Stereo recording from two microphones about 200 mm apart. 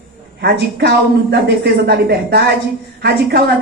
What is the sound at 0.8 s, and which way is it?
Speech, 55° right (ahead or behind).